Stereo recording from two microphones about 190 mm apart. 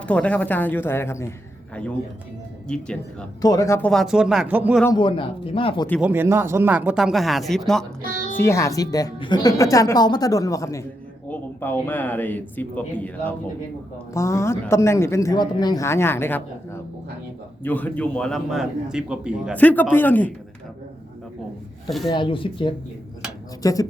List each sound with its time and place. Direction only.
0.0 s speech: 5° left (ahead or behind)
2.6 s a man's voice: 5° left (ahead or behind)
3.4 s speech: 20° left (ahead or behind)
3.8 s a man's voice: centre (ahead or behind)
4.9 s speech: 25° left (ahead or behind)
6.0 s speech: 10° right (ahead or behind)
8.0 s music: 45° right (ahead or behind)
8.4 s a man's voice: 15° left (ahead or behind); by 19.5 s 5° right (ahead or behind)
19.5 s speech: 10° left (ahead or behind)
21.8 s speech: centre (ahead or behind)
22.1 s speech: 25° left (ahead or behind)